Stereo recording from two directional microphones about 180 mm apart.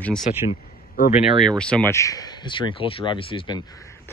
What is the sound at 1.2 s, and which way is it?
Speech, centre (ahead or behind).